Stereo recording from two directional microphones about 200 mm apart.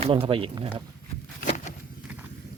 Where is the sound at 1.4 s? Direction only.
35° left (ahead or behind).